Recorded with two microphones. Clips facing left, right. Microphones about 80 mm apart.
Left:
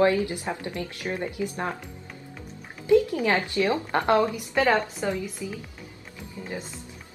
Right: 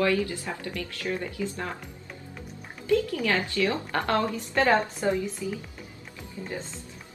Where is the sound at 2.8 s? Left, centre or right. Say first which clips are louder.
Left 5 dB; left.